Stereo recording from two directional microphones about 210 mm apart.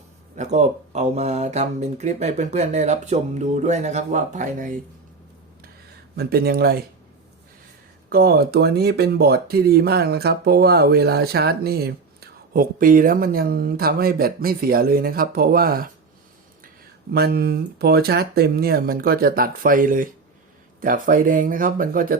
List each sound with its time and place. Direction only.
0.3 s speech: 35° right (ahead or behind)
6.1 s speech: 45° right (ahead or behind)
8.1 s speech: 45° right (ahead or behind)
17.1 s speech: 45° right (ahead or behind)